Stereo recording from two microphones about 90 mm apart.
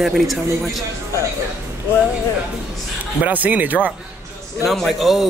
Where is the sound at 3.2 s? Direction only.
15° right (ahead or behind).